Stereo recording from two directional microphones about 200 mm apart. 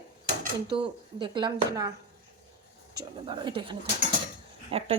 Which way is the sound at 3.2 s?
25° right (ahead or behind).